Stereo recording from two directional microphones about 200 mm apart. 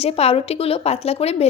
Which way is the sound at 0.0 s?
30° left (ahead or behind).